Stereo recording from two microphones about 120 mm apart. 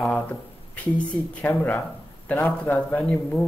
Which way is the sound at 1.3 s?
10° left (ahead or behind).